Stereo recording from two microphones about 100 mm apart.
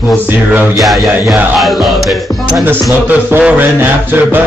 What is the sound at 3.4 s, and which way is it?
Music, 20° right (ahead or behind).